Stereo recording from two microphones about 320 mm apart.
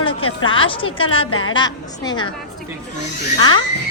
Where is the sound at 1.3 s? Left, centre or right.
Left.